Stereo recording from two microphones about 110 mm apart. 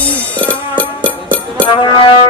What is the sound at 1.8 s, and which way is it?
Music, 50° left (ahead or behind).